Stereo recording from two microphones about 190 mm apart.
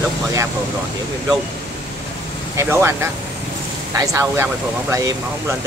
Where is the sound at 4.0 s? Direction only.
15° right (ahead or behind).